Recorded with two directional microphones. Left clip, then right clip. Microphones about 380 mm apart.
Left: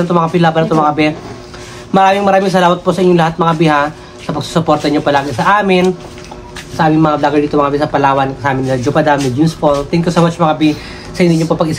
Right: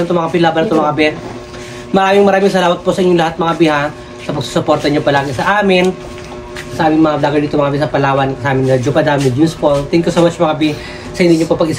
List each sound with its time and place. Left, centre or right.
0.1 s a man's voice: centre